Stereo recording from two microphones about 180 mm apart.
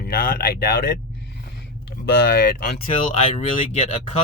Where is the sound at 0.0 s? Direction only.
55° left (ahead or behind).